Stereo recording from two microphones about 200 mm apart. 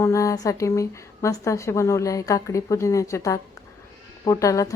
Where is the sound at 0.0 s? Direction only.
15° left (ahead or behind).